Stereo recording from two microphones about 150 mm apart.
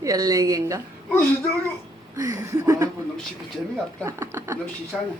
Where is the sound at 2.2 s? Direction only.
20° right (ahead or behind).